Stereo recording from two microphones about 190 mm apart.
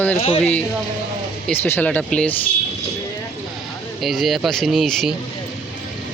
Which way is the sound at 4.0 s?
Centre (ahead or behind).